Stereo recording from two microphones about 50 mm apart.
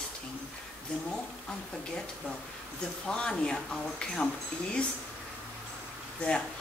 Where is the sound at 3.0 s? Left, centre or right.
Centre.